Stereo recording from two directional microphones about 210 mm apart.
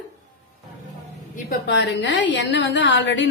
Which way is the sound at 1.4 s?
55° left (ahead or behind).